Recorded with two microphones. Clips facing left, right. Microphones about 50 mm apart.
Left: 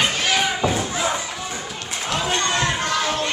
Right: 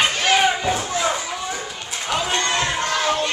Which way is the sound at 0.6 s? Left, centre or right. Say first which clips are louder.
Even; centre.